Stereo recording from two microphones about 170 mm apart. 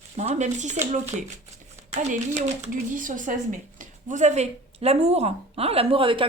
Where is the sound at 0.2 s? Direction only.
40° right (ahead or behind).